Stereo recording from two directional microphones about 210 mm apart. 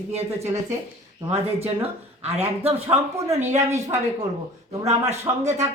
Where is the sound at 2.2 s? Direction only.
30° right (ahead or behind).